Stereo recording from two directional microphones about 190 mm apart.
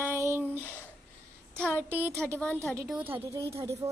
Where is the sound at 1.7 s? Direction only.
10° right (ahead or behind).